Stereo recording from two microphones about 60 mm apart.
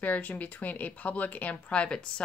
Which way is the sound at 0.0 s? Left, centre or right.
Left.